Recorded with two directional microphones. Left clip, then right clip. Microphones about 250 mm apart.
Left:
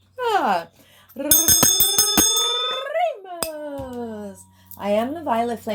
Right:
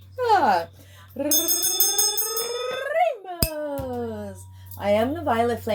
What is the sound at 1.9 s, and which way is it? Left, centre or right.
Bicycle bell, left.